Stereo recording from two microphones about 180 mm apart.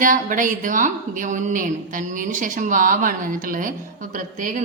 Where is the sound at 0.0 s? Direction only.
50° right (ahead or behind).